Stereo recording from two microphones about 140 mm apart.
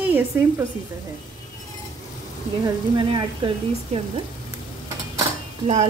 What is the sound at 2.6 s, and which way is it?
Speech, 35° right (ahead or behind).